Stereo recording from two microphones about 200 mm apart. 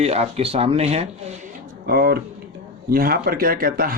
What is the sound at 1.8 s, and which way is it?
A man's voice, 50° right (ahead or behind).